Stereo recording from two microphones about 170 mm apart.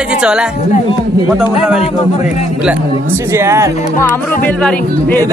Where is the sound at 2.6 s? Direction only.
10° right (ahead or behind).